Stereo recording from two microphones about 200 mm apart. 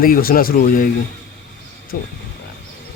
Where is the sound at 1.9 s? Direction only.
50° left (ahead or behind).